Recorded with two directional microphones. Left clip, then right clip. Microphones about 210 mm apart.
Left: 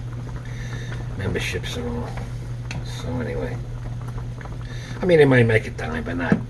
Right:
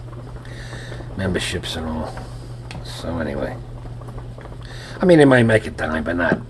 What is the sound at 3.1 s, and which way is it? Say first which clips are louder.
Speech: right 3 dB; 50° right (ahead or behind).